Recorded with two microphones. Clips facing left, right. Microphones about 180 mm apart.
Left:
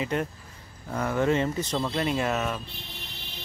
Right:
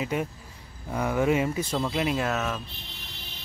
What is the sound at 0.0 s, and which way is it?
Speech, 5° right (ahead or behind).